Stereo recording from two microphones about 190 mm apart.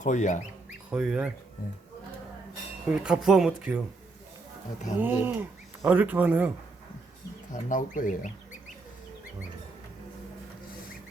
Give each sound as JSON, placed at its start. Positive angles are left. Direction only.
{"t": 0.0, "sound": "speech", "side_deg": 40}
{"t": 0.9, "sound": "speech", "side_deg": -5}
{"t": 2.8, "sound": "speech", "side_deg": -5}
{"t": 4.9, "sound": "speech", "side_deg": -10}
{"t": 7.5, "sound": "speech", "side_deg": 40}